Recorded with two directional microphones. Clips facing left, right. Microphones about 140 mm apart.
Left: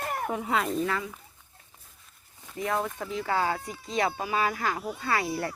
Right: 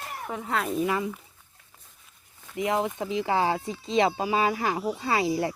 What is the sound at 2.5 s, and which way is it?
Speech, 20° right (ahead or behind).